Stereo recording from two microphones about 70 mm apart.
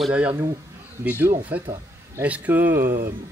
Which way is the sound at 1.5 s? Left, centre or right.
Right.